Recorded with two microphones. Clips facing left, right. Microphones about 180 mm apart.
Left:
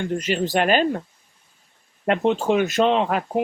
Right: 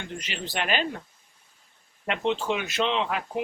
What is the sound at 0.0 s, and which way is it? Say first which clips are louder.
Speech: left 13 dB; 45° left (ahead or behind).